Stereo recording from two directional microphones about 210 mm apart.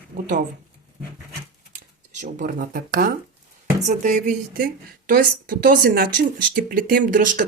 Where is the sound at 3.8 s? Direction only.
35° right (ahead or behind).